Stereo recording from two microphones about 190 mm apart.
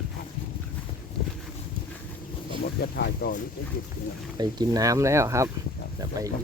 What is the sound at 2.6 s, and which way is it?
Speech, 55° left (ahead or behind).